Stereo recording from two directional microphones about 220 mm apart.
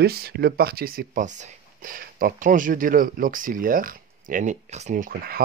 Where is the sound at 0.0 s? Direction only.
45° right (ahead or behind).